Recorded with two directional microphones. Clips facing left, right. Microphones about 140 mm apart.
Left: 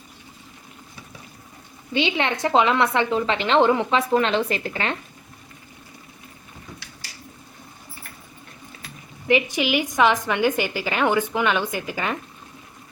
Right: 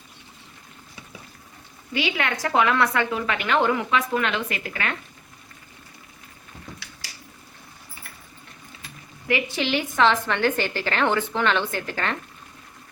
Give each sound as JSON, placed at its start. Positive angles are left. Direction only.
{"t": 1.9, "sound": "a woman's voice", "side_deg": 25}
{"t": 9.2, "sound": "a woman's voice", "side_deg": 15}